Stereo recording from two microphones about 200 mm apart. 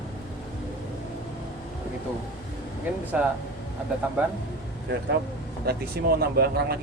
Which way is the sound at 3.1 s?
5° right (ahead or behind).